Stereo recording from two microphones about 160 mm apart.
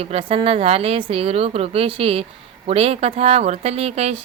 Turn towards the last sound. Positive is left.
turn(degrees=-40)  # may be behind; listen again after turning